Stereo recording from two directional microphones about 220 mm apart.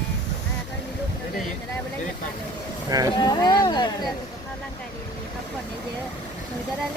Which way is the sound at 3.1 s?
20° left (ahead or behind).